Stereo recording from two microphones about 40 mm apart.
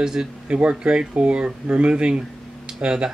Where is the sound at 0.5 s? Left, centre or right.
Right.